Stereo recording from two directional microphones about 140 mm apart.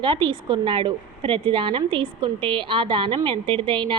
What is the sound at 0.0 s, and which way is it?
A woman's voice, 35° right (ahead or behind).